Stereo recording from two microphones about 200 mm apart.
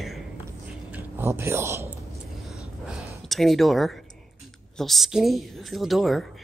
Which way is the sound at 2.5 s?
Centre (ahead or behind).